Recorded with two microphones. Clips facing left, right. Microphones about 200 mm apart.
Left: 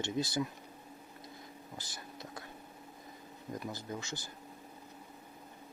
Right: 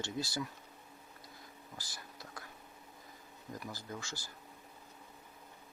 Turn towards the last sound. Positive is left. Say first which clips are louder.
# left 4 dB
turn(degrees=20)  # may be behind; listen again after turning